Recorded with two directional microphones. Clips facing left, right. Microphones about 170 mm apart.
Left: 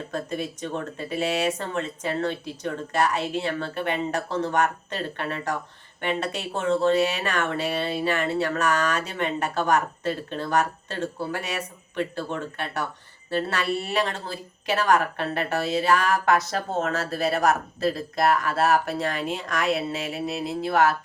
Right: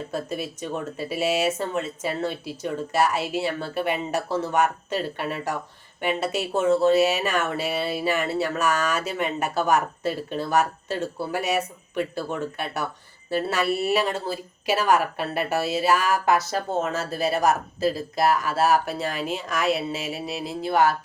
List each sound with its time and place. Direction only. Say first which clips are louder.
0.1 s speech: left 2 dB; 10° right (ahead or behind)